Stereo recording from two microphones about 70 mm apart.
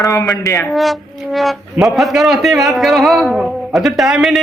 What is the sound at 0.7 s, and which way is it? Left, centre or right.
Speech, centre.